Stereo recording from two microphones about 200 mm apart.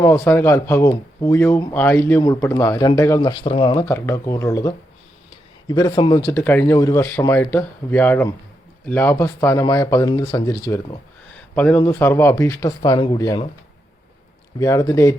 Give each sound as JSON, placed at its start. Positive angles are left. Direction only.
{"t": 0.0, "sound": "speech", "side_deg": 10}
{"t": 14.6, "sound": "speech", "side_deg": 15}